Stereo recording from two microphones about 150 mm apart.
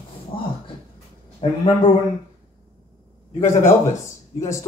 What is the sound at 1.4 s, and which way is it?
Speech, 35° left (ahead or behind).